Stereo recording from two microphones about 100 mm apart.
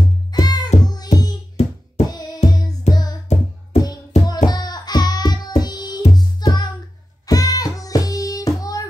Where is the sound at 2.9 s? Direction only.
90° left.